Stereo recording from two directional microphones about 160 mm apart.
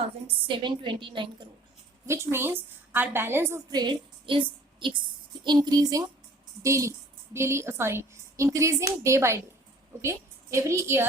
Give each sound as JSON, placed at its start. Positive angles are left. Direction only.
{"t": 0.4, "sound": "a woman's voice", "side_deg": -30}
{"t": 2.0, "sound": "a woman's voice", "side_deg": -15}
{"t": 3.7, "sound": "a woman's voice", "side_deg": -25}